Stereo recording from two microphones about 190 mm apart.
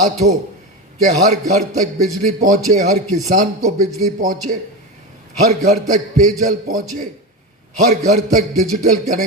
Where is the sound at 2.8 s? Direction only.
40° right (ahead or behind).